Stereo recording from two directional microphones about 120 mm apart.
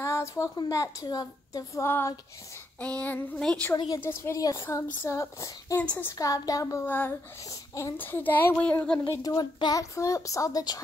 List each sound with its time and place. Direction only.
0.0 s speech: 25° left (ahead or behind)
2.8 s speech: 10° left (ahead or behind)
3.7 s a woman's voice: 35° left (ahead or behind)
4.0 s speech: 20° left (ahead or behind)
5.8 s speech: 15° left (ahead or behind)
6.1 s speech: 30° left (ahead or behind)
6.9 s speech: 15° left (ahead or behind)
7.4 s a sound: 25° left (ahead or behind)
8.0 s speech: 15° left (ahead or behind)
9.1 s speech: 30° left (ahead or behind)